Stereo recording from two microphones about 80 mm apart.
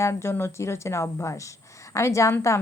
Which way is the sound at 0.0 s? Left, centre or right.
Left.